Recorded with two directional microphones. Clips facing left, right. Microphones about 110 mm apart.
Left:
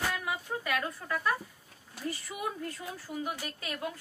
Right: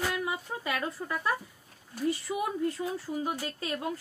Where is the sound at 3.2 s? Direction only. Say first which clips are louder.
Right 4 dB; 30° right (ahead or behind).